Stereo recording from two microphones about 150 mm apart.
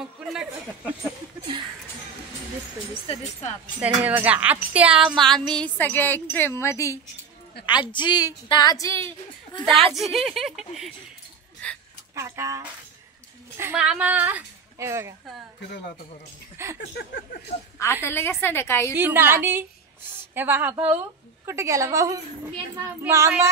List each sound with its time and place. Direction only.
0.0 s a sound: 5° right (ahead or behind)
3.8 s speech: 10° right (ahead or behind); by 7.0 s 20° left (ahead or behind)
7.6 s a woman's voice: 30° left (ahead or behind)
9.9 s speech: centre (ahead or behind)
11.6 s a sound: 10° left (ahead or behind)
12.2 s a woman's voice: 20° right (ahead or behind)
13.6 s a woman's voice: 10° right (ahead or behind)
16.7 s a sound: 90° left
18.0 s a woman's voice: 15° left (ahead or behind)
18.9 s a woman's voice: 15° right (ahead or behind)